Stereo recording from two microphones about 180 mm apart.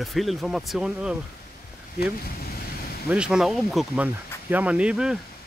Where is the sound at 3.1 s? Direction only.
5° right (ahead or behind).